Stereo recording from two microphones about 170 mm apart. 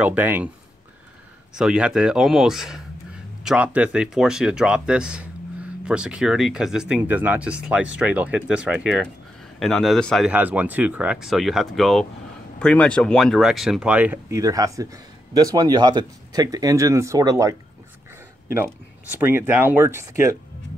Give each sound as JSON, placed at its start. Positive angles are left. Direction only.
{"t": 0.0, "sound": "speech", "side_deg": -10}
{"t": 1.5, "sound": "speech", "side_deg": -5}
{"t": 10.3, "sound": "speech", "side_deg": -10}
{"t": 19.1, "sound": "speech", "side_deg": -15}